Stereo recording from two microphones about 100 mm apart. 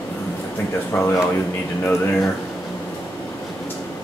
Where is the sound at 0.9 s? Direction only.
20° left (ahead or behind).